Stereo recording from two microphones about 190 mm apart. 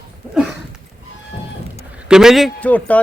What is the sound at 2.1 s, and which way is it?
Speech, centre (ahead or behind).